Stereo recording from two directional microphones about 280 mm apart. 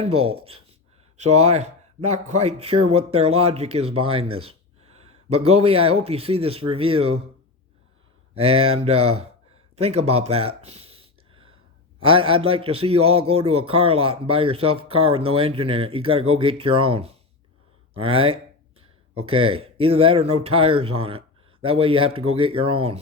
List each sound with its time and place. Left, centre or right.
0.2 s a man's voice: centre
8.4 s a man's voice: right
9.7 s a sound: right
11.9 s a man's voice: centre